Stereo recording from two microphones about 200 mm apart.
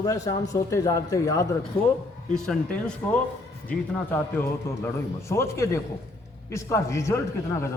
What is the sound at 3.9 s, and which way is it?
A man's voice, 10° left (ahead or behind).